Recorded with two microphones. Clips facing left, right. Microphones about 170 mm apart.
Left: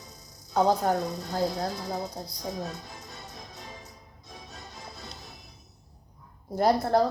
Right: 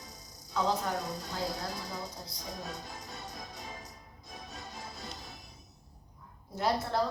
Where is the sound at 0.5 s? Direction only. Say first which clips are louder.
Left 8 dB; 45° left (ahead or behind).